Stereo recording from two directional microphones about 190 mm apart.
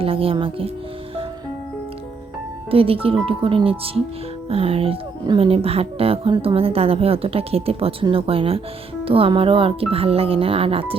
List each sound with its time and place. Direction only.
0.0 s speech: 30° right (ahead or behind)
2.6 s speech: 30° right (ahead or behind)